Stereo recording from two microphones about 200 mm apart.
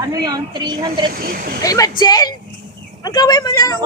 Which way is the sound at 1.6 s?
15° left (ahead or behind).